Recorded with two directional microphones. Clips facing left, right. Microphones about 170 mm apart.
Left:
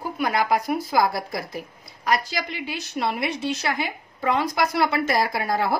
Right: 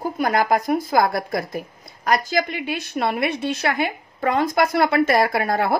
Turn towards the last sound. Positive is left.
turn(degrees=-60)  # may be behind; listen again after turning